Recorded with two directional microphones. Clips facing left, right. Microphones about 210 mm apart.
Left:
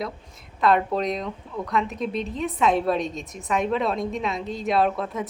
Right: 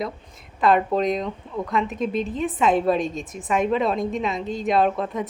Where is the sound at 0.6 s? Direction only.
Centre (ahead or behind).